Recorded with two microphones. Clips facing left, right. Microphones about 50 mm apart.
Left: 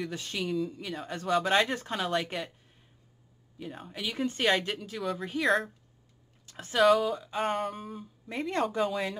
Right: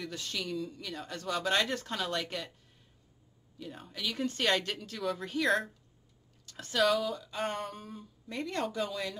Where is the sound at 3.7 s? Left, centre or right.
Centre.